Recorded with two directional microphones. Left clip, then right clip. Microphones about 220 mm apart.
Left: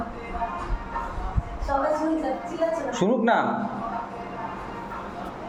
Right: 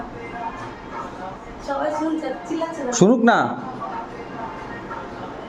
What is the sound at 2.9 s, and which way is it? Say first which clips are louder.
Speech: right 9 dB; 30° right (ahead or behind).